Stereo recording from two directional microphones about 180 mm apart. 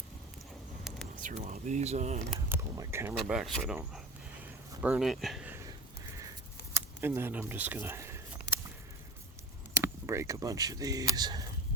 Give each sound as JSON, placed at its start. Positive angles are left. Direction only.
{"t": 1.1, "sound": "speech", "side_deg": -45}
{"t": 2.5, "sound": "speech", "side_deg": -15}
{"t": 3.2, "sound": "speech", "side_deg": 0}
{"t": 4.8, "sound": "speech", "side_deg": -5}
{"t": 6.7, "sound": "a sound", "side_deg": -15}
{"t": 9.8, "sound": "speech", "side_deg": -15}